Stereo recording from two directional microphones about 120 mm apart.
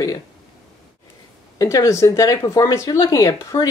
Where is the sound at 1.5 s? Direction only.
25° left (ahead or behind).